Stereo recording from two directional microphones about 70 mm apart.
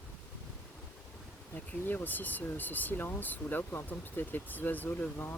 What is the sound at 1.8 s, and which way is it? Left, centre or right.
Speech, left.